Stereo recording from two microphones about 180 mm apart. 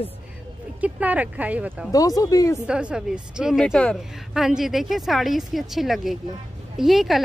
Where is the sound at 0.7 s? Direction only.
5° right (ahead or behind).